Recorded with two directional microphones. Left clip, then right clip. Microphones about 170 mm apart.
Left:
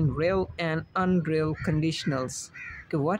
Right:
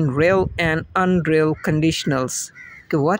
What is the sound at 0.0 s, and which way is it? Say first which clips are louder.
Speech: right 9 dB; 45° right (ahead or behind).